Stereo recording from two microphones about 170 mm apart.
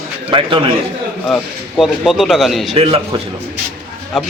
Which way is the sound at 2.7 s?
35° right (ahead or behind).